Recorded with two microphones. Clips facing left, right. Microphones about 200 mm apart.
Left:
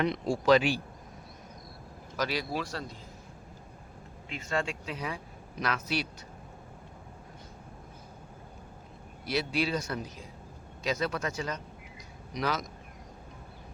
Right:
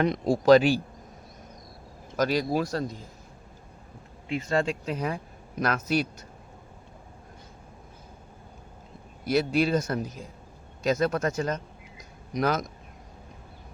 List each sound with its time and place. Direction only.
0.0 s speech: 40° right (ahead or behind)
2.1 s speech: 45° right (ahead or behind)
4.3 s speech: 35° right (ahead or behind)
9.2 s speech: 45° right (ahead or behind)